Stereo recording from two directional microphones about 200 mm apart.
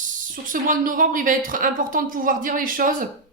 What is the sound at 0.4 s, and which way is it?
A woman's voice, 45° right (ahead or behind).